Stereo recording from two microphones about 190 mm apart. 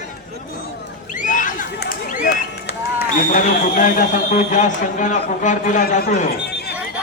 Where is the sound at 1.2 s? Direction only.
45° left (ahead or behind).